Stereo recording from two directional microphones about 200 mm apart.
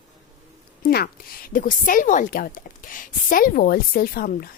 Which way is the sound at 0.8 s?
50° left (ahead or behind).